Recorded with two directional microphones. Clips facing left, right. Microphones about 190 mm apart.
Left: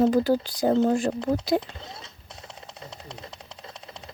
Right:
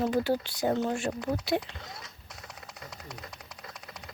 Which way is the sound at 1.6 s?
25° left (ahead or behind).